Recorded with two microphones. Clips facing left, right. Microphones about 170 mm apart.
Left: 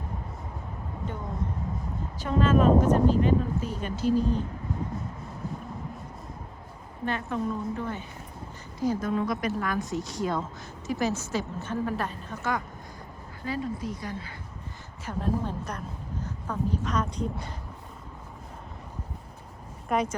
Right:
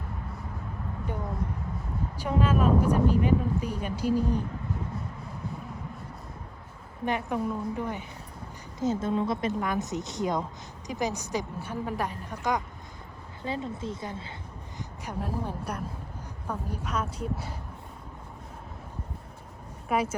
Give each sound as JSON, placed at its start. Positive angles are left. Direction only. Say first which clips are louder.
{"t": 2.1, "sound": "a woman's voice", "louder": "left 3 dB", "side_deg": -10}
{"t": 7.0, "sound": "a woman's voice", "louder": "right 1 dB", "side_deg": -15}
{"t": 19.9, "sound": "a woman's voice", "louder": "left 1 dB", "side_deg": -5}